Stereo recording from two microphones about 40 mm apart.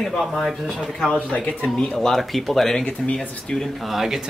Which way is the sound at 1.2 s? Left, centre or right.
Left.